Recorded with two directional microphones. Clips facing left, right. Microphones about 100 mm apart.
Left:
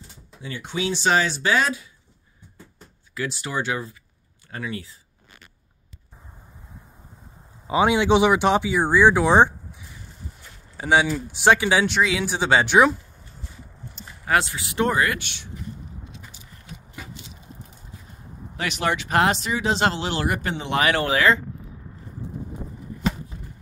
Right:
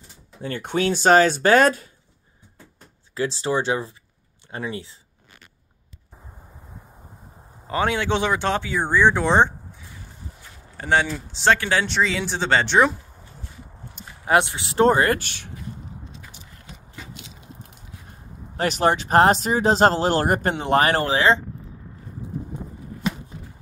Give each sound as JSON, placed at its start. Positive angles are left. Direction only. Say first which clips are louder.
{"t": 0.4, "sound": "speech", "louder": "right 5 dB", "side_deg": -50}
{"t": 3.2, "sound": "speech", "louder": "right 5 dB", "side_deg": -30}
{"t": 7.6, "sound": "speech", "louder": "left 4 dB", "side_deg": 15}
{"t": 14.2, "sound": "speech", "louder": "right 3 dB", "side_deg": -25}
{"t": 17.1, "sound": "biting", "louder": "even", "side_deg": -70}
{"t": 18.6, "sound": "speech", "louder": "right 5 dB", "side_deg": -40}